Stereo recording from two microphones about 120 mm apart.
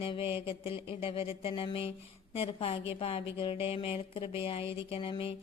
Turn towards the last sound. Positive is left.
turn(degrees=50)  # may be behind; listen again after turning